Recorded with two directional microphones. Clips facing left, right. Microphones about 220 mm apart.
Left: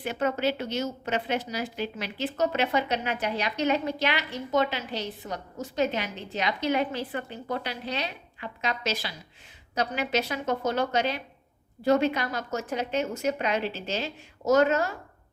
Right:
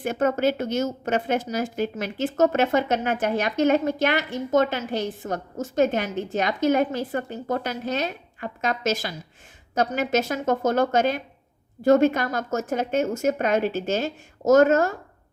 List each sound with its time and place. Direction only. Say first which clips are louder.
0.0 s a woman's voice: right 5 dB; 45° right (ahead or behind)